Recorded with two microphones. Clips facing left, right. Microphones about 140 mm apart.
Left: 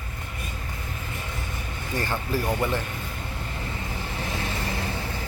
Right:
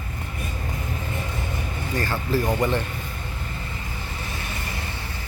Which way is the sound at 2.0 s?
15° left (ahead or behind).